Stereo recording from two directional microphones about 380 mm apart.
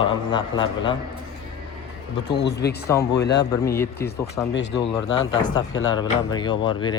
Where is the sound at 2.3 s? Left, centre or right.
Left.